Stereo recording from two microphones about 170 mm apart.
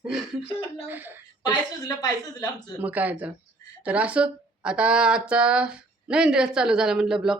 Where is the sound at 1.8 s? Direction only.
20° left (ahead or behind).